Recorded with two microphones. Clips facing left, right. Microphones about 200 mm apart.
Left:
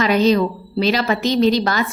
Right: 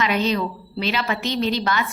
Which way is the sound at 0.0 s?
40° left (ahead or behind).